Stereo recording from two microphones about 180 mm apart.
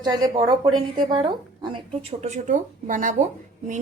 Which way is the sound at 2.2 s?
40° right (ahead or behind).